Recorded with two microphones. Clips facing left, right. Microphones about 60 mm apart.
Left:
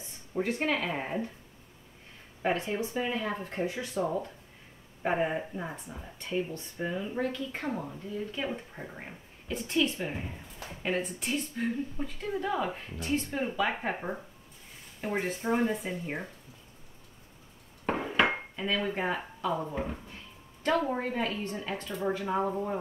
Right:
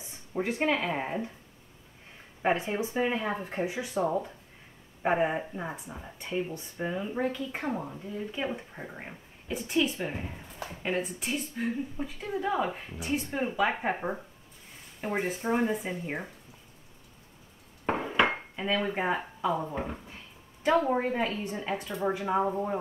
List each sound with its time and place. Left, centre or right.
0.3 s speech: centre
2.4 s speech: centre
5.0 s speech: centre
18.0 s dishes: centre
18.6 s speech: centre